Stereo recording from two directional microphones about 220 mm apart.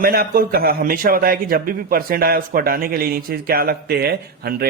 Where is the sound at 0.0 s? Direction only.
45° right (ahead or behind).